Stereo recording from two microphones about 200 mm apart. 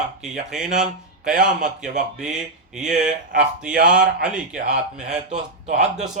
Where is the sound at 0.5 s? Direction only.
5° right (ahead or behind).